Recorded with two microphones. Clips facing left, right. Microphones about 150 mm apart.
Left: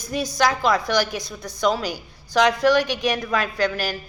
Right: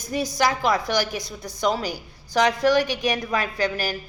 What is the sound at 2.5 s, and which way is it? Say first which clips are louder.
Speech: left 1 dB; 20° left (ahead or behind).